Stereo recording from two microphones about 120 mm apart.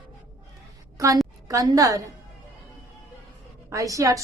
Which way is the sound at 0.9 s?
30° right (ahead or behind).